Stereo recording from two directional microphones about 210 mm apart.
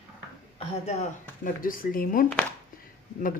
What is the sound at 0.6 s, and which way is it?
Speech, 35° left (ahead or behind).